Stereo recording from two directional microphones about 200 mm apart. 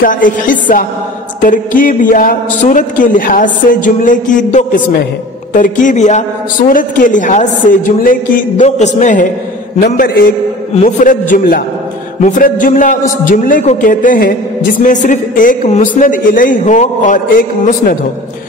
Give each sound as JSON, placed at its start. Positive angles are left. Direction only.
{"t": 0.0, "sound": "music", "side_deg": 40}
{"t": 1.4, "sound": "speech", "side_deg": 40}
{"t": 10.0, "sound": "music", "side_deg": 45}
{"t": 10.8, "sound": "speech", "side_deg": 40}